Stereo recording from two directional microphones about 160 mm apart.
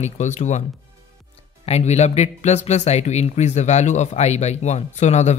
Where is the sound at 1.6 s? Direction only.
40° left (ahead or behind).